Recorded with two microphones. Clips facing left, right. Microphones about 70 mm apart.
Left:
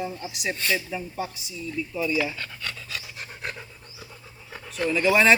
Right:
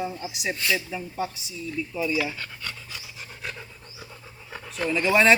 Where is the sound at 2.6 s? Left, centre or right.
Left.